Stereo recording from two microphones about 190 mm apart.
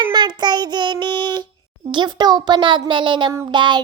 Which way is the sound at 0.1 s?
20° right (ahead or behind).